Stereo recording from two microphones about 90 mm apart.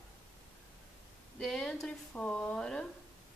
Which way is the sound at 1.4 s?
5° left (ahead or behind).